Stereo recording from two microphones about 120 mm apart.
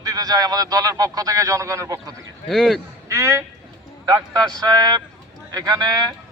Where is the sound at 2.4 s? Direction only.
Centre (ahead or behind).